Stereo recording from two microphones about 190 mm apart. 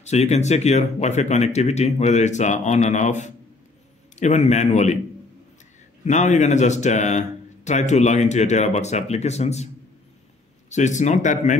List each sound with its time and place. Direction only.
0.0 s speech: 35° left (ahead or behind)
6.0 s speech: 40° left (ahead or behind)
10.7 s speech: 40° left (ahead or behind)